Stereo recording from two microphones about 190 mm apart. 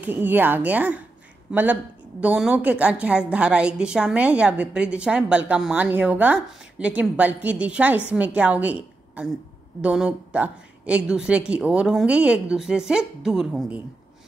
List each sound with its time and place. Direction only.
0.0 s a woman's voice: 10° right (ahead or behind)